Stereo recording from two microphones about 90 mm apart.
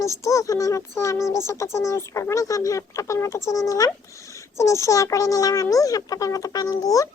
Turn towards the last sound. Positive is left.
turn(degrees=40)  # may be behind; listen again after turning